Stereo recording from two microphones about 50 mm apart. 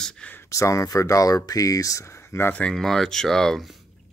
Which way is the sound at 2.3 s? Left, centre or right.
Left.